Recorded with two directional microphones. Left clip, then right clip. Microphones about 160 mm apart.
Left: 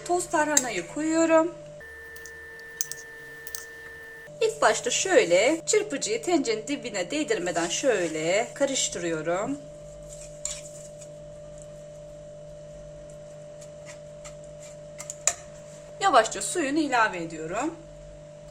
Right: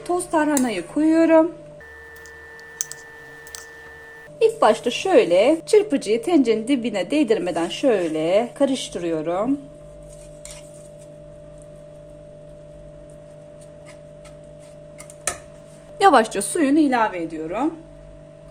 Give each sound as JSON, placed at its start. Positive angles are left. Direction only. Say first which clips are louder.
{"t": 0.1, "sound": "speech", "louder": "right 4 dB", "side_deg": -40}
{"t": 4.4, "sound": "a woman's voice", "louder": "right 6 dB", "side_deg": -25}
{"t": 5.6, "sound": "a woman's voice", "louder": "right 8 dB", "side_deg": -35}
{"t": 16.0, "sound": "a woman's voice", "louder": "right 6 dB", "side_deg": -70}
{"t": 17.3, "sound": "speech", "louder": "right 5 dB", "side_deg": -15}